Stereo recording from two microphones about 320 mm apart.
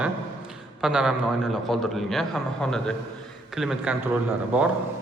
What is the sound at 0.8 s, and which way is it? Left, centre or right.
Speech, centre.